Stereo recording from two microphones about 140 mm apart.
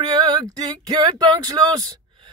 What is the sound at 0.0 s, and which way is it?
Speech, 30° right (ahead or behind).